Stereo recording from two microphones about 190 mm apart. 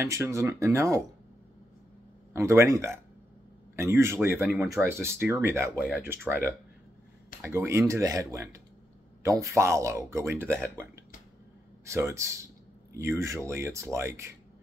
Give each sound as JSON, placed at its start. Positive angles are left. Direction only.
{"t": 0.0, "sound": "speech", "side_deg": -15}
{"t": 2.3, "sound": "speech", "side_deg": -15}
{"t": 7.4, "sound": "speech", "side_deg": -15}
{"t": 11.8, "sound": "speech", "side_deg": -15}